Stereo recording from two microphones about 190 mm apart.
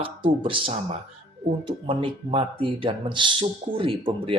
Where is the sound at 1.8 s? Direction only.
30° right (ahead or behind).